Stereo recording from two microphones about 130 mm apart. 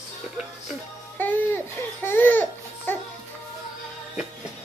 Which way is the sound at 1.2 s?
15° left (ahead or behind).